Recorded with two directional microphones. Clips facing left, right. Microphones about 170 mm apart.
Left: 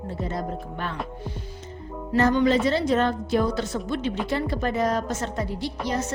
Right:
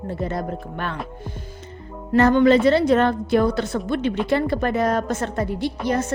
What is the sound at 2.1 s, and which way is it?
A woman's voice, 60° right (ahead or behind).